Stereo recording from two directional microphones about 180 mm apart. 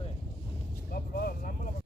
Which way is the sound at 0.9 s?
60° left (ahead or behind).